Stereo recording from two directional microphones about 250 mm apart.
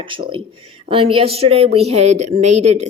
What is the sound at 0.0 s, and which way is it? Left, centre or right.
Speech, centre.